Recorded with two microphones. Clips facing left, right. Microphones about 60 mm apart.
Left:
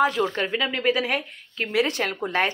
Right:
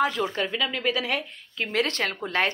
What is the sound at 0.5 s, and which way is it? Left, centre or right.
Speech, centre.